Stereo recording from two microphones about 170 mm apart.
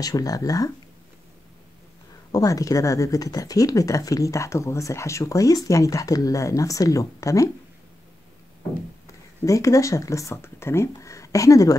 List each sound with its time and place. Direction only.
0.0 s speech: 20° left (ahead or behind)
2.3 s speech: 20° left (ahead or behind)
9.4 s speech: 20° left (ahead or behind)